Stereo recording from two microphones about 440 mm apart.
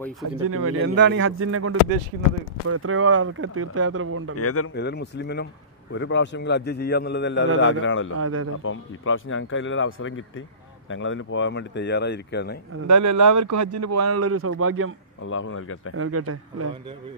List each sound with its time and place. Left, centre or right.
0.4 s speech: right
4.4 s a man's voice: left
8.2 s speech: right
8.6 s a man's voice: left
12.8 s speech: right
15.2 s a man's voice: left
16.0 s speech: right